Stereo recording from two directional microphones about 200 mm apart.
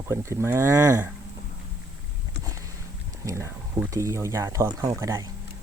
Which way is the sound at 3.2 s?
15° right (ahead or behind).